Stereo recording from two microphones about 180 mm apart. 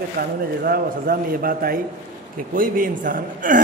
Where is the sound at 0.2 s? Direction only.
55° right (ahead or behind).